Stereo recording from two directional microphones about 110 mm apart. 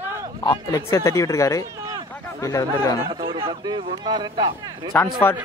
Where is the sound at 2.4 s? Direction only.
30° left (ahead or behind).